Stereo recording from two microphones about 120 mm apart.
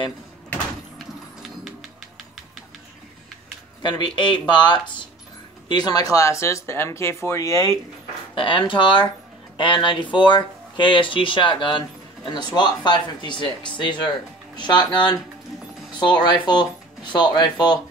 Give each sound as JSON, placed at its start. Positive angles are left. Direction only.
{"t": 3.8, "sound": "speech", "side_deg": 40}
{"t": 8.4, "sound": "speech", "side_deg": 45}